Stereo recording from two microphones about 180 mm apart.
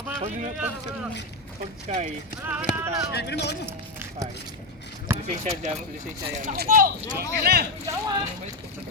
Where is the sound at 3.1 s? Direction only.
65° left (ahead or behind).